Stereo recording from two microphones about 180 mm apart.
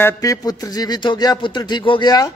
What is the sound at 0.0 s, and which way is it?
Speech, 20° left (ahead or behind).